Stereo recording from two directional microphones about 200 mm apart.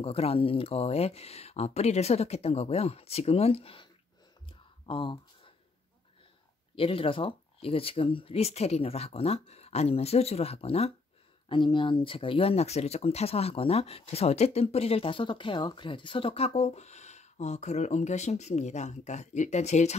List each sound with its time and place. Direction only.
0.0 s speech: 30° left (ahead or behind)
4.8 s a sound: 25° left (ahead or behind)
6.7 s speech: 25° left (ahead or behind)